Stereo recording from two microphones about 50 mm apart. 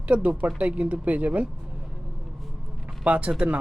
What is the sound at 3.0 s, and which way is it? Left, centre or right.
Speech, right.